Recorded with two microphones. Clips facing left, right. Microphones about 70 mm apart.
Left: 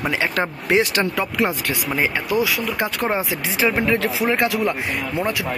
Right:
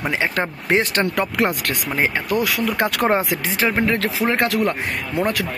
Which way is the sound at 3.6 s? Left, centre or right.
Right.